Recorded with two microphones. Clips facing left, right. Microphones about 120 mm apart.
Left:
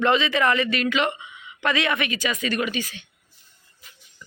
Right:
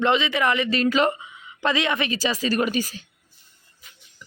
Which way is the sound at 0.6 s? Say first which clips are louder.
Right 3 dB; 30° right (ahead or behind).